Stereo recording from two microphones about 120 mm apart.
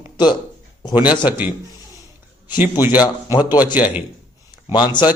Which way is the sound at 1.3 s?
10° right (ahead or behind).